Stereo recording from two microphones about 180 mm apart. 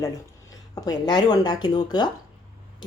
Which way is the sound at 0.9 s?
25° left (ahead or behind).